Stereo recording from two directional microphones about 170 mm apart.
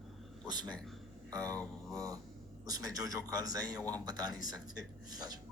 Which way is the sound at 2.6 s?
20° right (ahead or behind).